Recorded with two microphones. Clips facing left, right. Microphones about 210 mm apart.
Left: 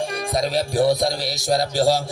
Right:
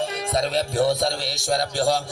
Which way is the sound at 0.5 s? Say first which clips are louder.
Left 4 dB; 15° left (ahead or behind).